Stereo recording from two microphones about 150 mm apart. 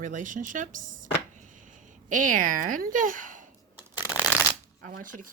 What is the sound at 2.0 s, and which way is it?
Speech, 60° right (ahead or behind).